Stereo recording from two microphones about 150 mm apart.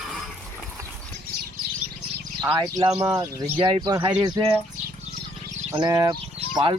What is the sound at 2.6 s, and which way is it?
Speech, 25° right (ahead or behind).